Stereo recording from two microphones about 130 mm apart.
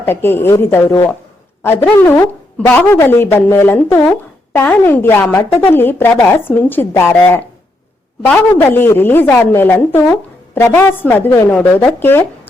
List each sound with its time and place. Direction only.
0.0 s a woman's voice: 15° left (ahead or behind)